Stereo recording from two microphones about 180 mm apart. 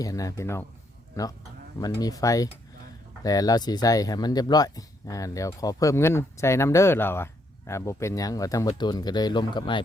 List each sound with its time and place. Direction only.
0.0 s speech: 20° left (ahead or behind)